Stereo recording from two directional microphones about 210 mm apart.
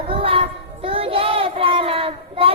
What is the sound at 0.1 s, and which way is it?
Child singing, 25° right (ahead or behind).